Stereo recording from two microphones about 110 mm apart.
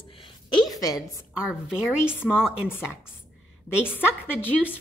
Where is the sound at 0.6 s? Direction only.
35° left (ahead or behind).